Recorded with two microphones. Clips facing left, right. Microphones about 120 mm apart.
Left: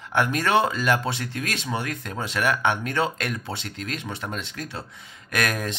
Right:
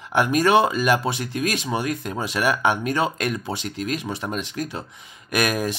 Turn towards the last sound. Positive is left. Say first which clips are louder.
# right 4 dB
turn(degrees=-10)  # may be behind; listen again after turning